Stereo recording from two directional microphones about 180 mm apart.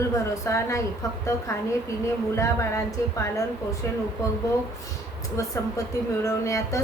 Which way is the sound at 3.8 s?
15° left (ahead or behind).